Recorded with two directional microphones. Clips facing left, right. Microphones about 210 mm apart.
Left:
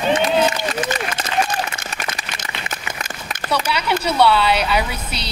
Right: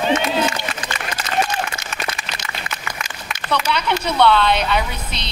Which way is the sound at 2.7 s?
45° left (ahead or behind).